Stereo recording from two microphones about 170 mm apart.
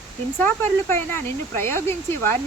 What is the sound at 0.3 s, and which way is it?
Speech, 10° left (ahead or behind).